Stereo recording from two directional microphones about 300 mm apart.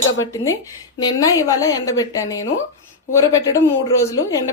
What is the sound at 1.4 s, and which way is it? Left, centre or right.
Speech, centre.